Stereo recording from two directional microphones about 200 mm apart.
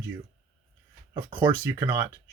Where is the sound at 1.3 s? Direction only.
10° right (ahead or behind).